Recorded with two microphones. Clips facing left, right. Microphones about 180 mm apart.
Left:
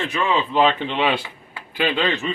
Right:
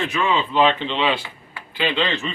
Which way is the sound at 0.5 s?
5° left (ahead or behind).